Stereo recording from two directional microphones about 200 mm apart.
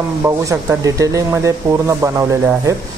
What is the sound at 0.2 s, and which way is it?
Speech, 15° right (ahead or behind).